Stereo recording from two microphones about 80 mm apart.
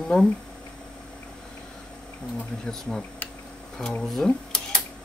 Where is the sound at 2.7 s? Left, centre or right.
Centre.